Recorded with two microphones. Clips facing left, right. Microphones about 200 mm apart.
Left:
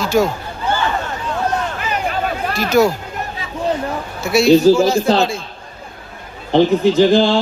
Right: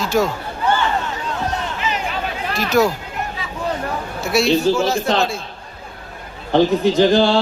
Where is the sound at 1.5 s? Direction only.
50° left (ahead or behind).